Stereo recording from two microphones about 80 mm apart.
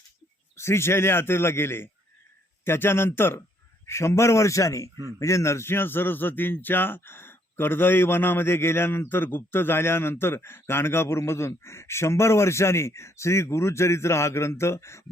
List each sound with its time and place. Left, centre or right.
0.5 s speech: left